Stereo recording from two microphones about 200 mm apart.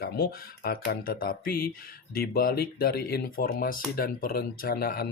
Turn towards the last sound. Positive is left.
turn(degrees=50)  # may be behind; listen again after turning